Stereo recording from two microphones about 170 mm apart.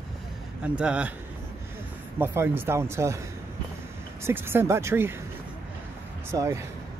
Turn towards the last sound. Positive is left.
turn(degrees=-15)  # may be behind; listen again after turning